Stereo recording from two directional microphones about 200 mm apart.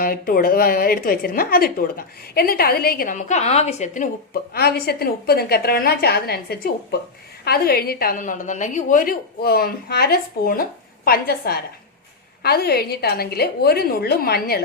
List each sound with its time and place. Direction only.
0.0 s a woman's voice: 45° left (ahead or behind)
4.5 s a woman's voice: 50° left (ahead or behind)